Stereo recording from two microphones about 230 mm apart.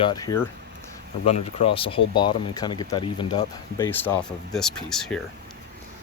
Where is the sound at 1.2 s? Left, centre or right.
Left.